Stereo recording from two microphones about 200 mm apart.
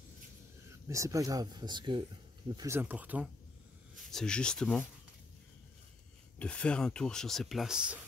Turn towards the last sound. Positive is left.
turn(degrees=-5)  # may be behind; listen again after turning